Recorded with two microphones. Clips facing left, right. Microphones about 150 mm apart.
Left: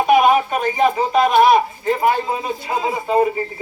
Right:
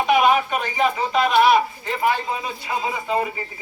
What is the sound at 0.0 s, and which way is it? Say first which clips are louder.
A man's voice: left 4 dB; 45° left (ahead or behind).